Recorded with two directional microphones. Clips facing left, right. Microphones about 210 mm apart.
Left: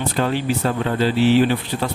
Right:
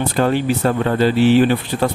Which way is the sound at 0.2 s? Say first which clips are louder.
Right 4 dB; 50° right (ahead or behind).